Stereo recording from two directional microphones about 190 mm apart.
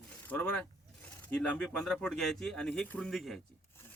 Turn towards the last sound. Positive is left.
turn(degrees=0)  # may be behind; listen again after turning